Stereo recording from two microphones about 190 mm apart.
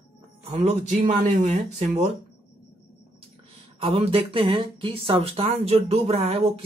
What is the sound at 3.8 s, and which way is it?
Speech, 30° right (ahead or behind).